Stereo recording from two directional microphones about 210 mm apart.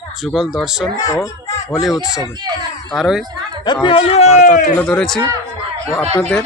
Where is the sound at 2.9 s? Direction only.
Centre (ahead or behind).